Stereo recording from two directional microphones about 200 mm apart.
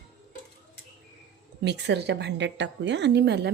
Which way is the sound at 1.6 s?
60° right (ahead or behind).